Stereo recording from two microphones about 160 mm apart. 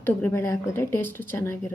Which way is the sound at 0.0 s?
15° left (ahead or behind).